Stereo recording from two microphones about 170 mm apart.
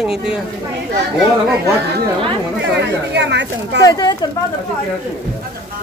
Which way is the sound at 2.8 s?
90° right.